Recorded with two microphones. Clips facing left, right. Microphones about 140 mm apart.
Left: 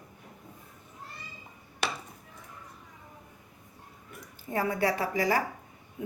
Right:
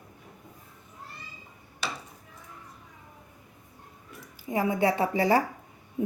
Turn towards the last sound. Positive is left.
turn(degrees=-30)  # may be behind; listen again after turning